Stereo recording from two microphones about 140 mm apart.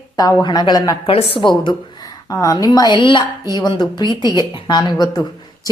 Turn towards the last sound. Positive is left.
turn(degrees=30)  # may be behind; listen again after turning